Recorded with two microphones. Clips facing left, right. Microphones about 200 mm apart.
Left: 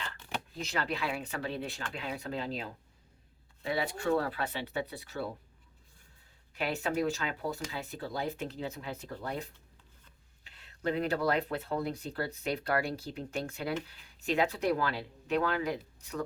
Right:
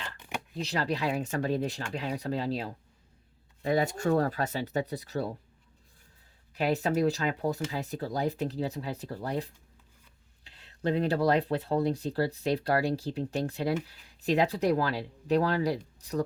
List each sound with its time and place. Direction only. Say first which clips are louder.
0.6 s speech: right 5 dB; 35° right (ahead or behind)
6.5 s speech: right 5 dB; 40° right (ahead or behind)